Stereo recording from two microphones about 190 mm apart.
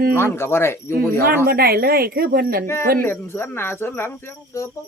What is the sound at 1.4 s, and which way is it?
Speech, 55° right (ahead or behind).